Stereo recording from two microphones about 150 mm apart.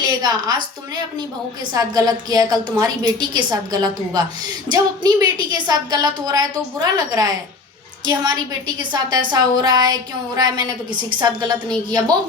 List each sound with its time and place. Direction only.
0.0 s a woman's voice: 25° right (ahead or behind)
1.7 s a woman's voice: 25° right (ahead or behind)